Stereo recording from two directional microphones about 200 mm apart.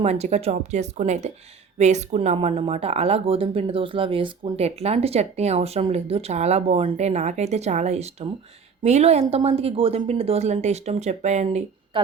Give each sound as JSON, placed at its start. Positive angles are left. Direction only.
{"t": 0.0, "sound": "speech", "side_deg": -35}